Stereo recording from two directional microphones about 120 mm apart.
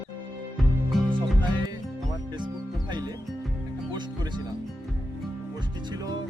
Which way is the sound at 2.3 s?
40° right (ahead or behind).